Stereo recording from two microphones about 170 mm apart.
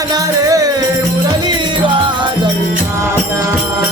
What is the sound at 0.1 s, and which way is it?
Music, 20° right (ahead or behind).